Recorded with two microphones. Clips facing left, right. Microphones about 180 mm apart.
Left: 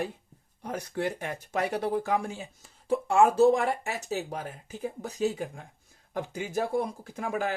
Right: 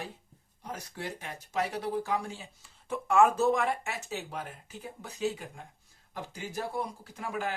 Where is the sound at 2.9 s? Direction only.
30° left (ahead or behind).